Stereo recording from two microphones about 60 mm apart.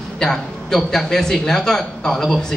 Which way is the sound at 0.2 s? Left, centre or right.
Centre.